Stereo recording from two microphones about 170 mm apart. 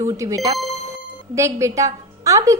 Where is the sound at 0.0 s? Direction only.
20° right (ahead or behind).